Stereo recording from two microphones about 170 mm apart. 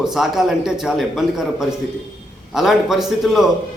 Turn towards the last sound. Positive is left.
turn(degrees=0)  # may be behind; listen again after turning